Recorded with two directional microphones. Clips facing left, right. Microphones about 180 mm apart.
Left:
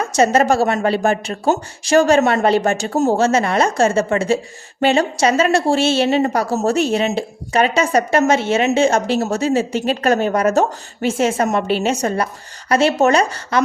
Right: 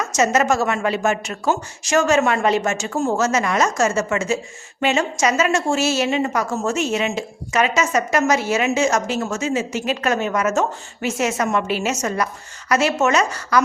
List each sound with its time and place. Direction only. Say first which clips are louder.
0.0 s a woman's voice: left 4 dB; 30° left (ahead or behind)